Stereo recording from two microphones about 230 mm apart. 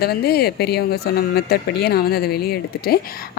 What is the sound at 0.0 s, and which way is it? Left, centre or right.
Speech, left.